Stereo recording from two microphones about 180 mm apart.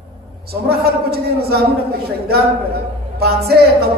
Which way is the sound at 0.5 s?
60° right (ahead or behind).